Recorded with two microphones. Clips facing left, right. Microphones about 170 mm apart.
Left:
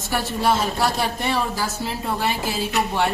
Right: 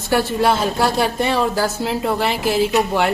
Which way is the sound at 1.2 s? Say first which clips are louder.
Right 6 dB; 85° right.